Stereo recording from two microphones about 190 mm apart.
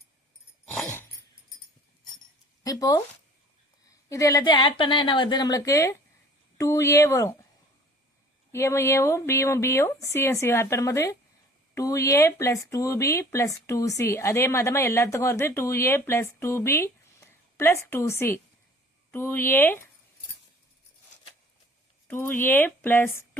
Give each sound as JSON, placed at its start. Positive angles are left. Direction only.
{"t": 2.6, "sound": "speech", "side_deg": 20}
{"t": 4.1, "sound": "speech", "side_deg": 15}
{"t": 8.5, "sound": "speech", "side_deg": 15}
{"t": 22.0, "sound": "speech", "side_deg": 10}